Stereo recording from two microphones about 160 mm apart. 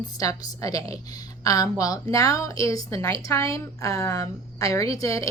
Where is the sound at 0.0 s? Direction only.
20° left (ahead or behind).